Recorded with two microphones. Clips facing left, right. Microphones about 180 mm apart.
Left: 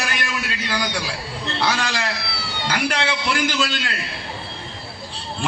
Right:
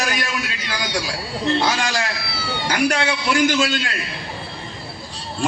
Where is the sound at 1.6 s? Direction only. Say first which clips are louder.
Right 2 dB; 45° right (ahead or behind).